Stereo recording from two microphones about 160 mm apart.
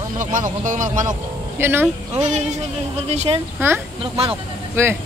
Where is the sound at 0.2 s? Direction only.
50° right (ahead or behind).